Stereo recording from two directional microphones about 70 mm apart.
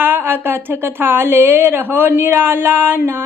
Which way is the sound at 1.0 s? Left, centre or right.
Right.